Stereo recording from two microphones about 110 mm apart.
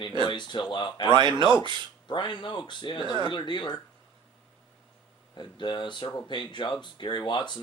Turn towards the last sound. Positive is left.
turn(degrees=45)  # may be behind; listen again after turning